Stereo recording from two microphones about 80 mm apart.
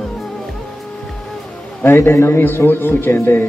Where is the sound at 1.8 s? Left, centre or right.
Left.